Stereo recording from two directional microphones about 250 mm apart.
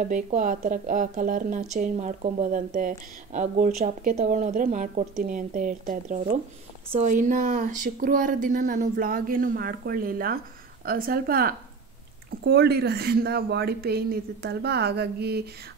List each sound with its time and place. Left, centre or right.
0.0 s speech: right